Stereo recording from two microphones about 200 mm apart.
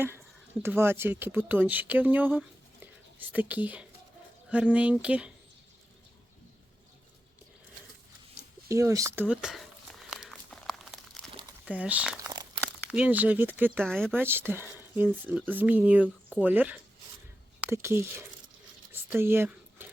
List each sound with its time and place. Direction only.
0.6 s speech: 10° right (ahead or behind)
8.7 s speech: 15° right (ahead or behind)
10.1 s crumpling: centre (ahead or behind)
11.6 s speech: 5° right (ahead or behind)
13.8 s speech: centre (ahead or behind)
14.2 s speech: 10° right (ahead or behind)
19.1 s a sound: 10° right (ahead or behind)